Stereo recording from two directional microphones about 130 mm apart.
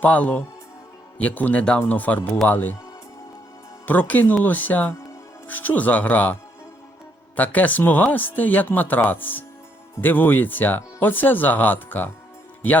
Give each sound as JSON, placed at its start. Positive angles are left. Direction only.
{"t": 0.0, "sound": "speech", "side_deg": 10}
{"t": 3.8, "sound": "speech", "side_deg": 15}
{"t": 7.3, "sound": "speech", "side_deg": 10}